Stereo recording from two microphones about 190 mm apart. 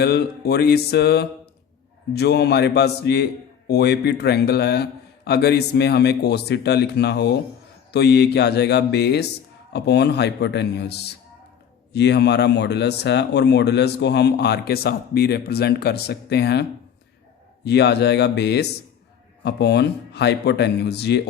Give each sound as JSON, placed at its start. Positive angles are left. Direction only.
{"t": 0.0, "sound": "a man's voice", "side_deg": 60}